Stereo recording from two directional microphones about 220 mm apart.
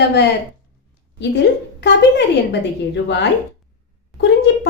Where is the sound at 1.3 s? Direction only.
50° left (ahead or behind).